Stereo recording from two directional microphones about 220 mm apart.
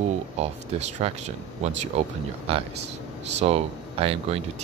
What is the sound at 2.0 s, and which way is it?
Speech, 30° right (ahead or behind).